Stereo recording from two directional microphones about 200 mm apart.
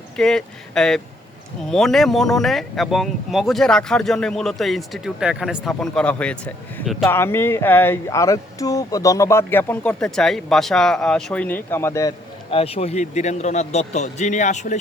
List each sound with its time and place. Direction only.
0.2 s speech: centre (ahead or behind)
12.5 s a man's voice: 30° left (ahead or behind)